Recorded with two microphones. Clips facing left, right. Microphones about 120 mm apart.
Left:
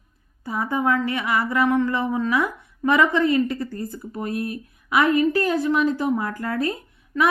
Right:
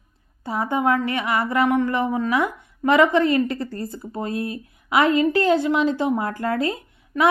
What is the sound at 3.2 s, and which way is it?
Speech, 20° left (ahead or behind).